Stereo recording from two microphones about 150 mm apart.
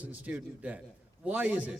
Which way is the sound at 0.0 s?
10° right (ahead or behind).